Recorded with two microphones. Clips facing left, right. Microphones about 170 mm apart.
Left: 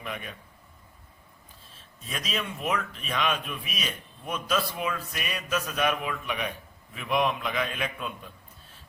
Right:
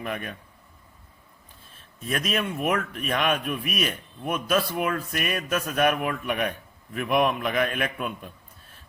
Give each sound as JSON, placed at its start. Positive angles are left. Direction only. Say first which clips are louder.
{"t": 0.0, "sound": "a man's voice", "louder": "right 5 dB", "side_deg": -55}
{"t": 1.7, "sound": "a man's voice", "louder": "right 8 dB", "side_deg": -60}